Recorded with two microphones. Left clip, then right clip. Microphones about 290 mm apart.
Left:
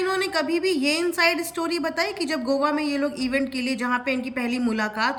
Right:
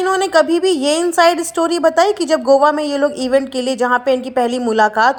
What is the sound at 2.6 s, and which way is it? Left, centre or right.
Speech, right.